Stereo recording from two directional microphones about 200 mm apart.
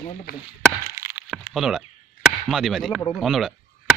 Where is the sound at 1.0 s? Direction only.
15° right (ahead or behind).